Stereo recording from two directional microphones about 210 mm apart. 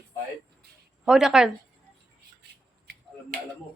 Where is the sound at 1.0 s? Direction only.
5° right (ahead or behind).